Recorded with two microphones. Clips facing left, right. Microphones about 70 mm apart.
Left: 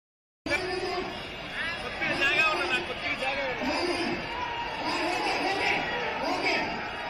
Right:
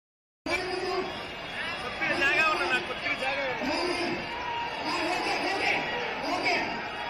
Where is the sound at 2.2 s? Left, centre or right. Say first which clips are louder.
Right 1 dB; centre.